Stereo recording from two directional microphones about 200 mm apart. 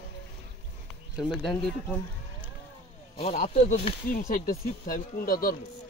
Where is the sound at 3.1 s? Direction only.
35° left (ahead or behind).